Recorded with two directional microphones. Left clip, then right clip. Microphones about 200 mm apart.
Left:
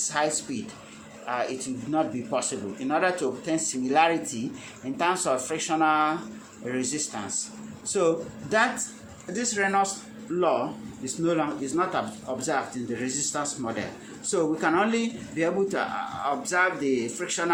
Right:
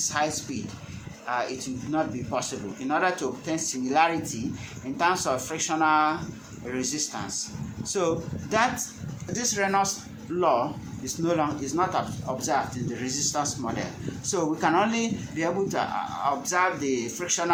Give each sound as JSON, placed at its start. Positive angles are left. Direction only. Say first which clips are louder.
{"t": 0.1, "sound": "speech", "louder": "left 1 dB", "side_deg": 0}